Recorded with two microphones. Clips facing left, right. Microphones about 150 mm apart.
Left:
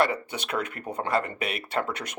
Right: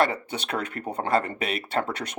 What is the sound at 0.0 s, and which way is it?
Speech, 25° right (ahead or behind).